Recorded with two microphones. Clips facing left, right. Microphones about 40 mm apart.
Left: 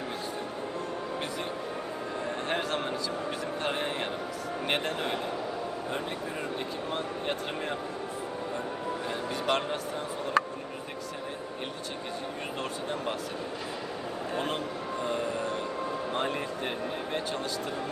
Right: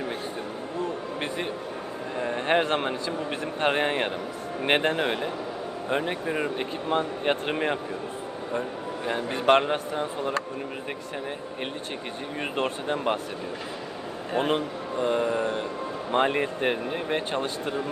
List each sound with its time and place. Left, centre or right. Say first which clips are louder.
2.2 s a sound: right 9 dB; right
3.6 s speech: right 9 dB; right
9.0 s speech: right 9 dB; right
12.5 s speech: right 8 dB; right
14.3 s speech: right 8 dB; right
15.0 s music: right 7 dB; right
16.1 s speech: right 12 dB; right